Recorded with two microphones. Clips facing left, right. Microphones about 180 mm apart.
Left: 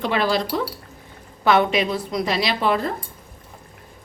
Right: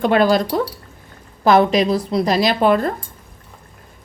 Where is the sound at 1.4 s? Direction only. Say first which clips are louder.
Right 5 dB; 40° right (ahead or behind).